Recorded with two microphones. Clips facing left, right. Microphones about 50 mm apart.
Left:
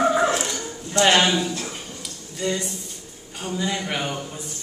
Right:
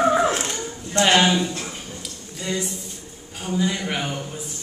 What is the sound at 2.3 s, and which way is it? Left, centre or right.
A woman's voice, centre.